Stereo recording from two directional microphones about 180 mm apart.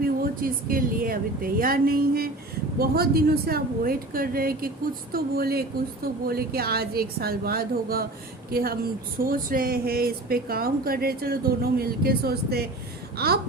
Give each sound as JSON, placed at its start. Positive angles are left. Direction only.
{"t": 0.0, "sound": "speech", "side_deg": -50}